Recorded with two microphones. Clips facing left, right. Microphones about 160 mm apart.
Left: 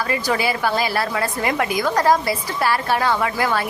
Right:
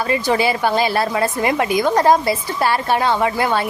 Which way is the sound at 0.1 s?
25° right (ahead or behind).